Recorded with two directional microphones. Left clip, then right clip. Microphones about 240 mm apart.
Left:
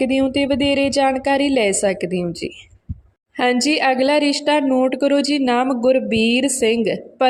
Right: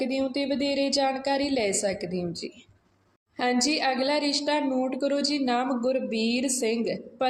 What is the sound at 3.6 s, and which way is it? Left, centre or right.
A woman's voice, left.